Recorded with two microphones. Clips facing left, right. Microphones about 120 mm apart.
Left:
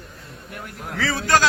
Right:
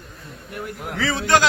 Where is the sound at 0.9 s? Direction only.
15° right (ahead or behind).